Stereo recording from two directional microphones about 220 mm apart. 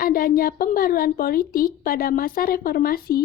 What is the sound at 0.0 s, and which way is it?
A woman's voice, 40° left (ahead or behind).